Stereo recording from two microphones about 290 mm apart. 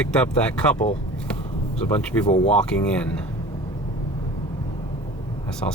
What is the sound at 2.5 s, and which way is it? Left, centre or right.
Speech, centre.